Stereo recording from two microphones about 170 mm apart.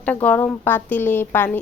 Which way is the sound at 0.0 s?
10° left (ahead or behind).